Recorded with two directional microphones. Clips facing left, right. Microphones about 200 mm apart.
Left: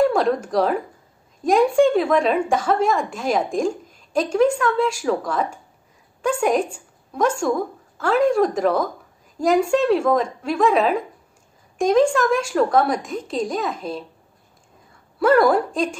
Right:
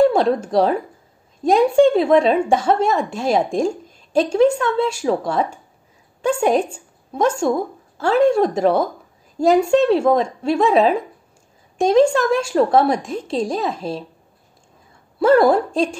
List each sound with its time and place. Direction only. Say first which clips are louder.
0.0 s a woman's voice: right 3 dB; 25° right (ahead or behind)
15.1 s a woman's voice: right 2 dB; 25° right (ahead or behind)